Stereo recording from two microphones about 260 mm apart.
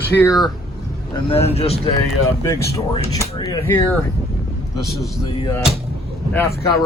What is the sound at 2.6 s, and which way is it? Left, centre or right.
Speech, centre.